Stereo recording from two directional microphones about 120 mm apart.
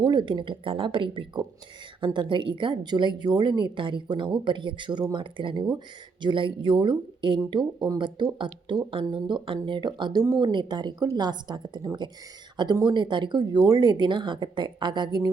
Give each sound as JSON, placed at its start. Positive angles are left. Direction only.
{"t": 0.0, "sound": "a woman's voice", "side_deg": -40}